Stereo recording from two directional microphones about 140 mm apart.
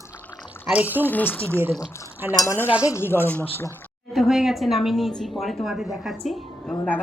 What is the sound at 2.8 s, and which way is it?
Speech, 15° left (ahead or behind).